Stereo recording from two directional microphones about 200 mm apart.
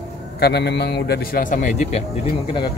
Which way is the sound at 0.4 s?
55° left (ahead or behind).